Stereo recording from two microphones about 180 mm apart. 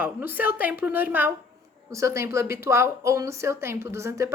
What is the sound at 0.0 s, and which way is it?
A woman's voice, 10° right (ahead or behind).